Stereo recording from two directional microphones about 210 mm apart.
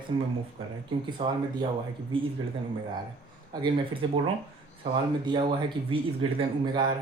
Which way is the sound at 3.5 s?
20° right (ahead or behind).